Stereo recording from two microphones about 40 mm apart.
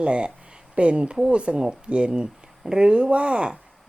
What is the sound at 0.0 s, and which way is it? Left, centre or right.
Speech, right.